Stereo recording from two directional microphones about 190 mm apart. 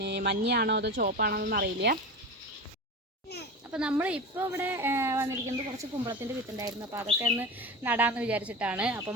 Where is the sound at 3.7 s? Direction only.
5° right (ahead or behind).